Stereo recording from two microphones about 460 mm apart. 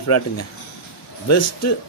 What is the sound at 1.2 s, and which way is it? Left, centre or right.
Speech, left.